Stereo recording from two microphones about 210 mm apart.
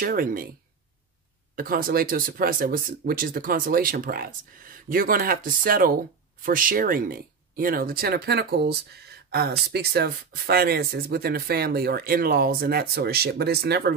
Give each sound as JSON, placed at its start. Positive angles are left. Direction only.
{"t": 0.0, "sound": "speech", "side_deg": -45}
{"t": 1.5, "sound": "speech", "side_deg": -45}